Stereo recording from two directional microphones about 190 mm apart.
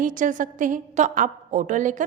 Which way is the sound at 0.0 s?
45° right (ahead or behind).